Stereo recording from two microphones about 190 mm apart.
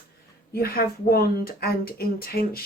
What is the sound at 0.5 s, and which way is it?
Speech, 50° left (ahead or behind).